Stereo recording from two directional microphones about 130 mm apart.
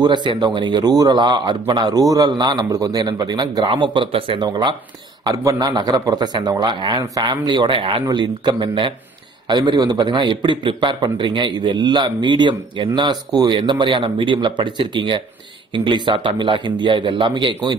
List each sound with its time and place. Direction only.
0.0 s a man's voice: 35° right (ahead or behind)